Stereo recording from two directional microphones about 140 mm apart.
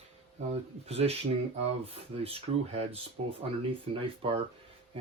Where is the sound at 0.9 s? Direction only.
45° right (ahead or behind).